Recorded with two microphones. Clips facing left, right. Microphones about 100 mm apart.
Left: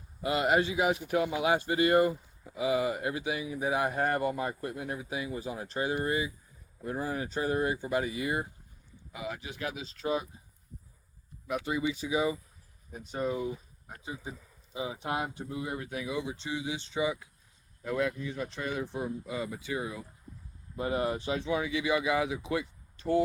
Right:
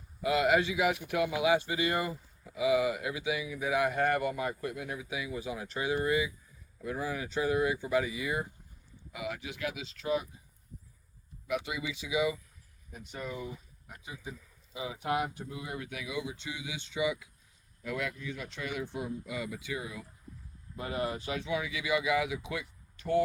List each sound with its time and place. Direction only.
0.3 s speech: 35° left (ahead or behind)
11.4 s speech: 40° left (ahead or behind)